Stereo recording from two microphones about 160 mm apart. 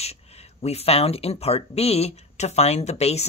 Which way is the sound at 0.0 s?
40° left (ahead or behind).